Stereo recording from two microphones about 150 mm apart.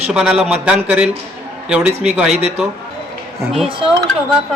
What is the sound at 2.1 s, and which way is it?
Speech, 5° right (ahead or behind).